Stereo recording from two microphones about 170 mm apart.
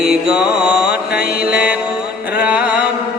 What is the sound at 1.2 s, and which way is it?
Mantra, 65° left (ahead or behind).